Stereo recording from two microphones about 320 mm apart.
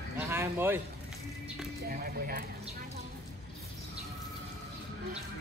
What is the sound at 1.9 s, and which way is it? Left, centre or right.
Speech, right.